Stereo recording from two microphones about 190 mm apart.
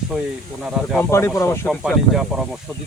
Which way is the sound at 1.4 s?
15° left (ahead or behind).